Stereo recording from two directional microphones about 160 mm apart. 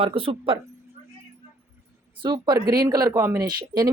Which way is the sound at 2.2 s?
30° right (ahead or behind).